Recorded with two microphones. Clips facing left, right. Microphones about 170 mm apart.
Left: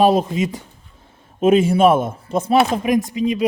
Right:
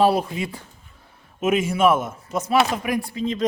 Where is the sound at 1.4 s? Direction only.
30° left (ahead or behind).